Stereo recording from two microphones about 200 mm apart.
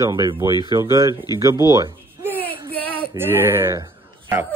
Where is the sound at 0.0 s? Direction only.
15° right (ahead or behind).